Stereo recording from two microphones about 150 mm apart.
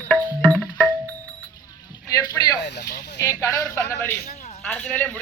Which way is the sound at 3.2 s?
20° left (ahead or behind).